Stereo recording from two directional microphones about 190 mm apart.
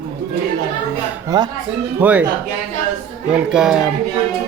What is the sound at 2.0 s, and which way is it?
Speech, 5° right (ahead or behind).